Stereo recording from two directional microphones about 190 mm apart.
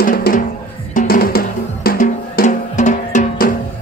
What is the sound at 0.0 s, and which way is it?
Music, 50° left (ahead or behind).